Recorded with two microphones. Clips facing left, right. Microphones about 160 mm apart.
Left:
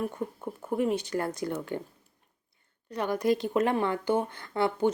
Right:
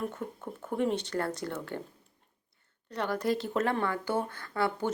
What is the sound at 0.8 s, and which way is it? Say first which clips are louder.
Speech: left 1 dB; 10° left (ahead or behind).